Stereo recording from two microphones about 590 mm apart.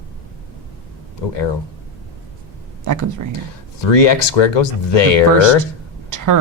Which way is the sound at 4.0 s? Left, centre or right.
Left.